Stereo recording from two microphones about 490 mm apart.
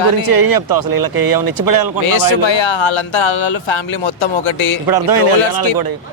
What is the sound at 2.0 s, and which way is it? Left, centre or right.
Speech, left.